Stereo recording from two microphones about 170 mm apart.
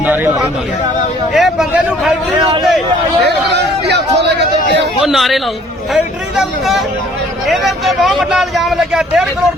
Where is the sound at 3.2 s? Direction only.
85° right.